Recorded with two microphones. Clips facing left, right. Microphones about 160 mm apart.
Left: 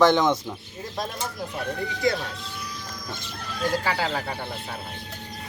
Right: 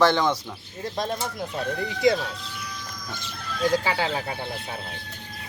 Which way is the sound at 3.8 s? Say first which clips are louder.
Even; 15° right (ahead or behind).